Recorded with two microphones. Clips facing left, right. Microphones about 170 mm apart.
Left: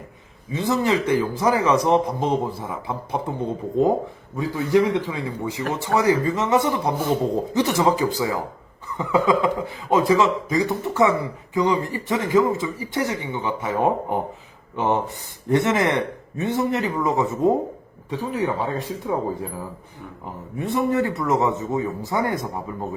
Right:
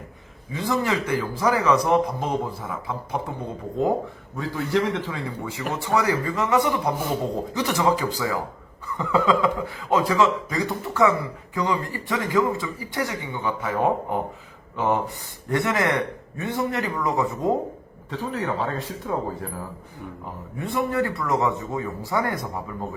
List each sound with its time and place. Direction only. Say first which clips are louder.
0.5 s speech: left 3 dB; 20° left (ahead or behind)
4.4 s speech: left 5 dB; 15° left (ahead or behind)